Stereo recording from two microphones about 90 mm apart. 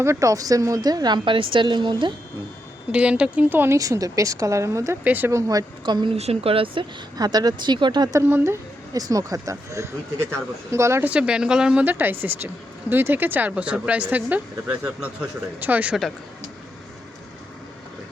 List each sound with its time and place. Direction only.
0.0 s speech: 35° right (ahead or behind)
1.2 s a woman's voice: 70° right (ahead or behind)
2.9 s speech: 15° right (ahead or behind)
3.8 s speech: 40° right (ahead or behind)
5.0 s speech: 20° right (ahead or behind)
5.3 s speech: 35° right (ahead or behind)
5.8 s a woman's voice: 60° right (ahead or behind); by 6.8 s 90° right
7.2 s speech: 50° right (ahead or behind)
8.1 s speech: 25° right (ahead or behind)
8.9 s speech: 40° right (ahead or behind)
11.0 s speech: 10° right (ahead or behind)